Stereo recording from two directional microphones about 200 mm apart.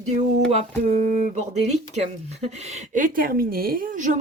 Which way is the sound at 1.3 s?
35° right (ahead or behind).